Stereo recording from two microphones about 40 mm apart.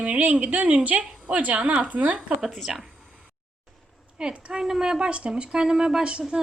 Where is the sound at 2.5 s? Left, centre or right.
Centre.